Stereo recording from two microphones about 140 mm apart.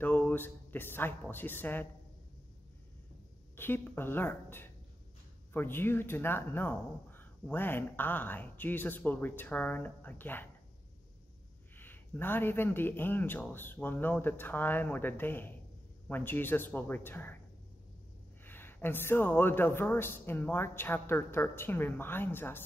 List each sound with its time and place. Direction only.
0.0 s speech: 15° left (ahead or behind)
3.5 s speech: 15° left (ahead or behind)
11.7 s speech: 15° left (ahead or behind)
18.4 s speech: 15° left (ahead or behind)